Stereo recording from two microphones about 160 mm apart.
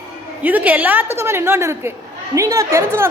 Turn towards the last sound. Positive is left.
turn(degrees=-15)  # may be behind; listen again after turning